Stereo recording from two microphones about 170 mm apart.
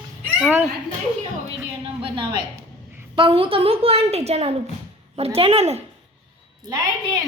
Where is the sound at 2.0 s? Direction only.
30° right (ahead or behind).